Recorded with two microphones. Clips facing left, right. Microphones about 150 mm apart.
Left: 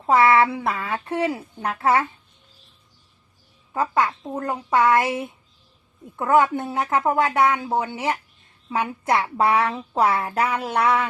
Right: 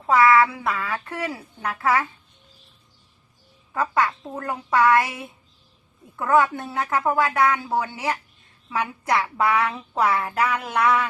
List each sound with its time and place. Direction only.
0.0 s a woman's voice: 25° left (ahead or behind)
3.7 s a woman's voice: 25° left (ahead or behind)